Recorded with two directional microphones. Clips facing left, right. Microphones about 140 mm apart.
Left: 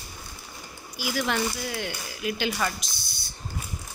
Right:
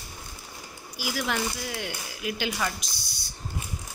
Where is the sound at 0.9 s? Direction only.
5° right (ahead or behind).